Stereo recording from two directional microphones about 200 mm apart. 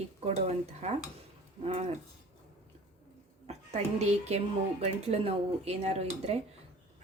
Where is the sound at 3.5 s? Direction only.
35° right (ahead or behind).